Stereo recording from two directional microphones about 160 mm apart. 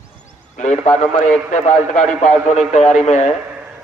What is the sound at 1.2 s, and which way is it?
A man's voice, 50° left (ahead or behind).